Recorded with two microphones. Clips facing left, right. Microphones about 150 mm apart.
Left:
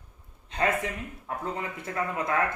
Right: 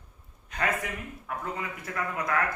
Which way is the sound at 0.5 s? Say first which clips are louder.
Left 4 dB; 25° left (ahead or behind).